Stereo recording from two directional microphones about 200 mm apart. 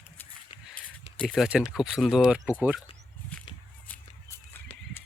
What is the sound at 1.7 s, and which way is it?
Speech, centre (ahead or behind).